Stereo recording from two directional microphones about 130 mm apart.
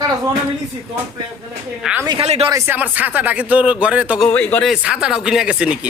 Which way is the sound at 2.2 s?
55° right (ahead or behind).